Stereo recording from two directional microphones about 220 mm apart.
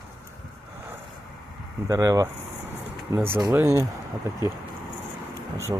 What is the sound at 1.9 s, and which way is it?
Speech, 15° right (ahead or behind).